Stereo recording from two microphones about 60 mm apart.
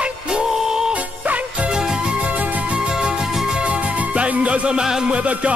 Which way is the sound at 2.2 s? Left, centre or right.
Right.